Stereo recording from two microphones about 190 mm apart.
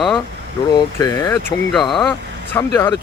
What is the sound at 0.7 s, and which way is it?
Speech, 20° left (ahead or behind).